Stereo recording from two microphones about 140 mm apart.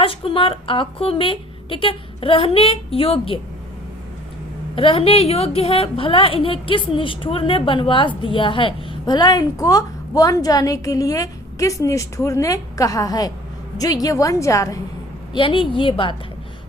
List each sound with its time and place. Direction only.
0.0 s a woman's voice: 40° left (ahead or behind)
4.7 s a woman's voice: 40° left (ahead or behind); by 14.8 s 20° left (ahead or behind)
15.3 s a woman's voice: 35° left (ahead or behind)